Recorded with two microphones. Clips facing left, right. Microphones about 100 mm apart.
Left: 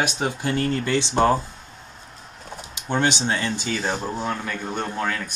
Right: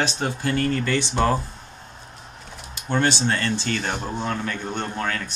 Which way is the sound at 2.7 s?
15° left (ahead or behind).